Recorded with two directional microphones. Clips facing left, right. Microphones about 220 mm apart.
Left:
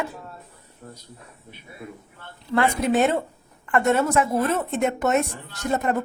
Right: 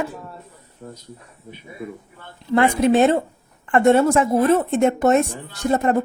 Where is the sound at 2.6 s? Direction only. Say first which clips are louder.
Right 5 dB; 25° right (ahead or behind).